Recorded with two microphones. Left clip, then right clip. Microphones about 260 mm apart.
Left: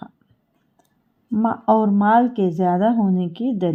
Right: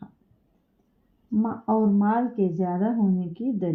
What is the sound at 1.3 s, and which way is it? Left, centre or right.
Speech, left.